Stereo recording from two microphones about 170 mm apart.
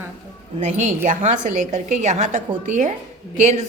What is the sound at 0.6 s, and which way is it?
A woman's voice, 45° right (ahead or behind).